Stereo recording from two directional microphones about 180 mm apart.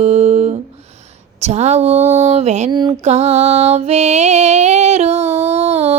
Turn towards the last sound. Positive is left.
turn(degrees=-35)  # may be behind; listen again after turning